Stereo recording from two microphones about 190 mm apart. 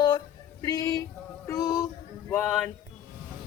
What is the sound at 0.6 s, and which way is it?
Speech, 20° left (ahead or behind).